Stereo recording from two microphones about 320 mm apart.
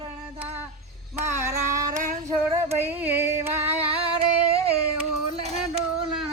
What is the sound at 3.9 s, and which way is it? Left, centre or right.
Singing, centre.